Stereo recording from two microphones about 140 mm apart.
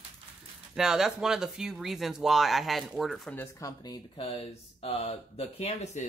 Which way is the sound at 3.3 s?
20° left (ahead or behind).